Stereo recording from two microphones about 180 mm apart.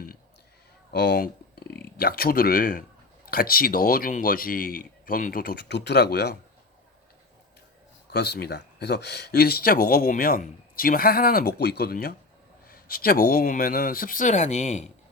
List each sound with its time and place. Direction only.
0.9 s speech: 65° left (ahead or behind)
8.1 s speech: 65° left (ahead or behind); by 14.8 s 40° left (ahead or behind)